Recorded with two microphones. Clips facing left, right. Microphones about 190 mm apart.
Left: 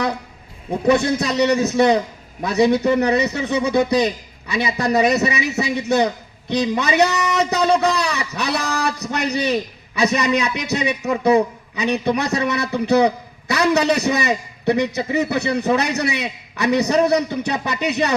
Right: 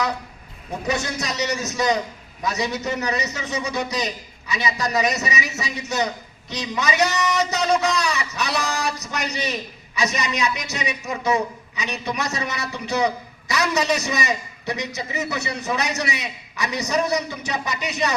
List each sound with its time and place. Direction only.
0.9 s a man's voice: 60° left (ahead or behind)